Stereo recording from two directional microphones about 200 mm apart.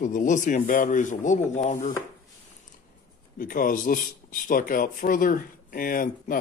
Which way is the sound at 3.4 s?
45° left (ahead or behind).